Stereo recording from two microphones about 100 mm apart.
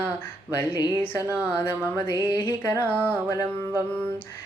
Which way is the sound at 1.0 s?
20° left (ahead or behind).